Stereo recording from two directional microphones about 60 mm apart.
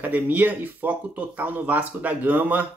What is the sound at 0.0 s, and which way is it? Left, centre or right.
Speech, right.